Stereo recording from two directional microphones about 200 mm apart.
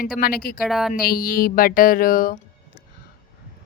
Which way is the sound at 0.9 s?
50° left (ahead or behind).